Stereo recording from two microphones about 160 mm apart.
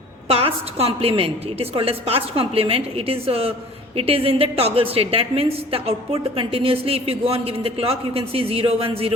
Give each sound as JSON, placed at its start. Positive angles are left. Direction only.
{"t": 0.3, "sound": "a woman's voice", "side_deg": -35}